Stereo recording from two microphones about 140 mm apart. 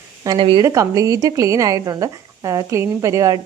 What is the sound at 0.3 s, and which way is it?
Speech, 40° right (ahead or behind).